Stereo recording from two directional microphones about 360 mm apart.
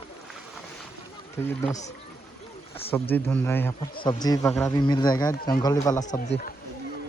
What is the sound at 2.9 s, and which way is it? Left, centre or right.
Speech, centre.